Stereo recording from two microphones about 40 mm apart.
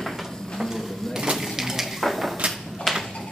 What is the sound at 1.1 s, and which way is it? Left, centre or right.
Cash register, centre.